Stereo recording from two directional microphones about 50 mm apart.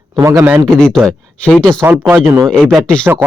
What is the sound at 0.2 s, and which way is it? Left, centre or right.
Speech, right.